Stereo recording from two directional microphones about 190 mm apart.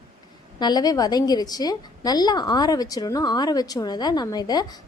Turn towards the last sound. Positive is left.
turn(degrees=20)  # may be behind; listen again after turning